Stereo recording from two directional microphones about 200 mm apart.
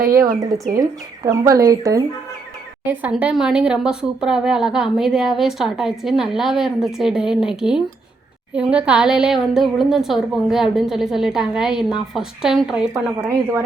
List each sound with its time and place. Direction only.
0.2 s speech: 15° right (ahead or behind)